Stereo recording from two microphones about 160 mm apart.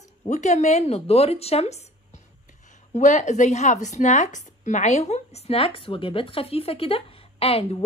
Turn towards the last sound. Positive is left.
turn(degrees=35)  # may be behind; listen again after turning